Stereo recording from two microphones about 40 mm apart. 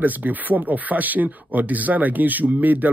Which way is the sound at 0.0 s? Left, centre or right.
Right.